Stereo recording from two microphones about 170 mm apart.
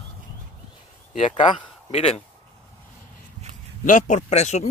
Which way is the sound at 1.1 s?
40° left (ahead or behind).